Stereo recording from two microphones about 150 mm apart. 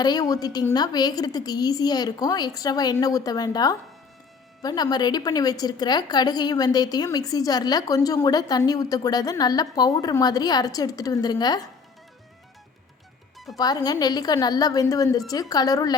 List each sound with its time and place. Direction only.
0.0 s a woman's voice: 25° left (ahead or behind)
13.6 s a woman's voice: 25° left (ahead or behind)